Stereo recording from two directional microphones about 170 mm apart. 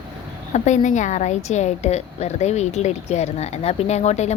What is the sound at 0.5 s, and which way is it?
A woman's voice, 45° left (ahead or behind).